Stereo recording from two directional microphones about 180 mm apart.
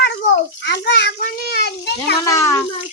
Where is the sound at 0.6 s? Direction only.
70° left (ahead or behind).